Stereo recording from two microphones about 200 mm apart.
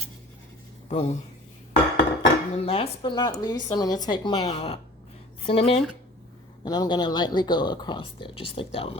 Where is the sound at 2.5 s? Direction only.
30° left (ahead or behind).